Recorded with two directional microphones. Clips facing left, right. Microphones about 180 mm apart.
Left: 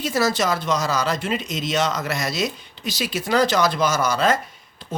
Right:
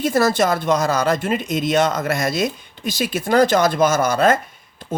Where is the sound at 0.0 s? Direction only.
55° right (ahead or behind).